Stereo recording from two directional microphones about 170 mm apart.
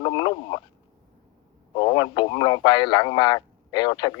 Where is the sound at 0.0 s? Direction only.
25° left (ahead or behind).